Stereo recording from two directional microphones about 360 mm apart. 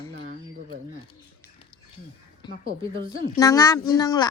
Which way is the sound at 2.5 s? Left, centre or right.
Right.